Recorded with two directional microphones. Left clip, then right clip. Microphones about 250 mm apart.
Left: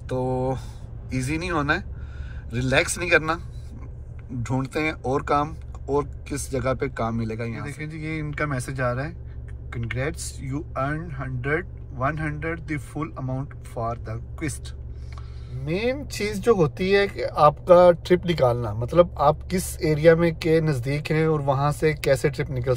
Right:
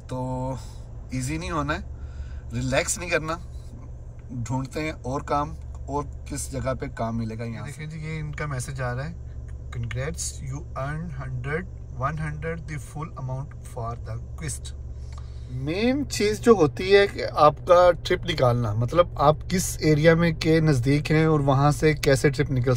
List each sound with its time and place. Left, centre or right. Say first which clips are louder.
1.2 s speech: left 3 dB; left
4.4 s speech: left 4 dB; centre
10.5 s speech: left 8 dB; centre
15.6 s speech: right 1 dB; centre